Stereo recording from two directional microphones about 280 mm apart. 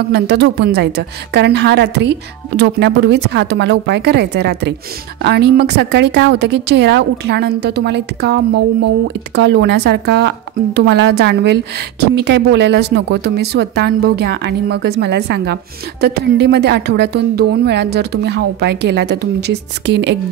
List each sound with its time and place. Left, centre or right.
0.1 s speech: right